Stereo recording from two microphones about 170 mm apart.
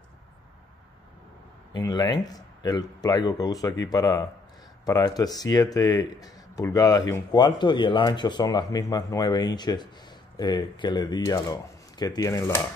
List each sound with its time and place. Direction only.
1.7 s speech: 25° left (ahead or behind)